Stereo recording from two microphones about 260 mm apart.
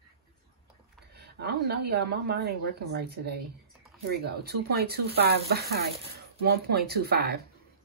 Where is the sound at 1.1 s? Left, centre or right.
Right.